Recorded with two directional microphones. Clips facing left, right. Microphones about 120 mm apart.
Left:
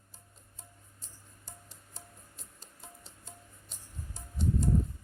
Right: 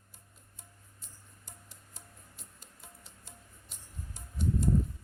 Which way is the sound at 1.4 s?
35° left (ahead or behind).